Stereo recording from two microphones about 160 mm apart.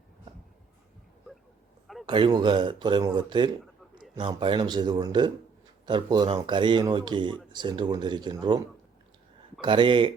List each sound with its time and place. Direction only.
2.0 s speech: 30° right (ahead or behind)